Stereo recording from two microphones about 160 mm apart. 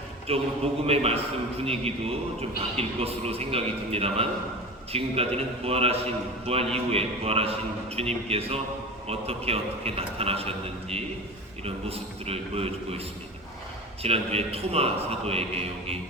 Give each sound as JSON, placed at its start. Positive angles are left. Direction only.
{"t": 0.3, "sound": "a man's voice", "side_deg": -40}
{"t": 14.0, "sound": "a man's voice", "side_deg": -40}